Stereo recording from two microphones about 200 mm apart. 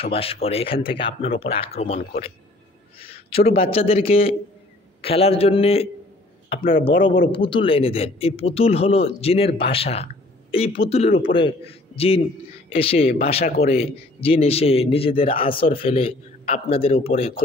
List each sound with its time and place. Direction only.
0.1 s a man's voice: 30° left (ahead or behind)
3.0 s a man's voice: 30° left (ahead or behind)